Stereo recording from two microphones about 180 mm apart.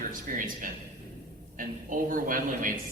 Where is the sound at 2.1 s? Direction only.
50° right (ahead or behind).